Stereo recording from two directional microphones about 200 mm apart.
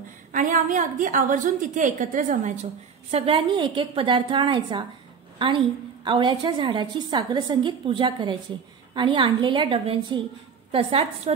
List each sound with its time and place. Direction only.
0.3 s a woman's voice: 40° right (ahead or behind); by 4.8 s 25° right (ahead or behind)
6.0 s a woman's voice: 25° right (ahead or behind)